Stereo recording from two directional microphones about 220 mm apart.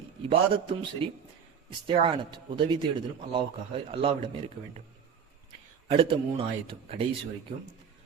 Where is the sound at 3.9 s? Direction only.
25° right (ahead or behind).